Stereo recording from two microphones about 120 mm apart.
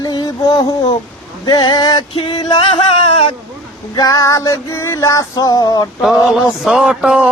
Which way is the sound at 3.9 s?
30° left (ahead or behind).